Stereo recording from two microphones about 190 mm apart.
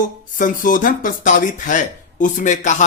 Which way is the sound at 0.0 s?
45° left (ahead or behind).